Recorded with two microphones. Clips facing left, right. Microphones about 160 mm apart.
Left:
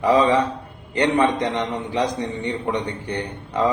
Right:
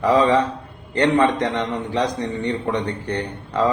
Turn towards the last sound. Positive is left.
turn(degrees=10)  # may be behind; listen again after turning